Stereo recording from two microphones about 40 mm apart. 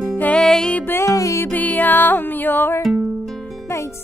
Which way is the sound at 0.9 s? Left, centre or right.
Left.